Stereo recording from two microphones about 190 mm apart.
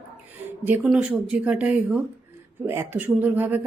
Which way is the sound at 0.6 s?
10° right (ahead or behind).